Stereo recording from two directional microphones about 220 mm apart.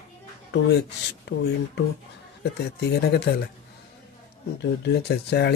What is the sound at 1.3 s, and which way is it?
Speech, 50° left (ahead or behind).